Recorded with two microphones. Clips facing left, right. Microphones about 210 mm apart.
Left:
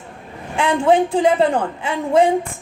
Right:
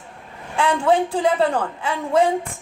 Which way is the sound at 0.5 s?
25° left (ahead or behind).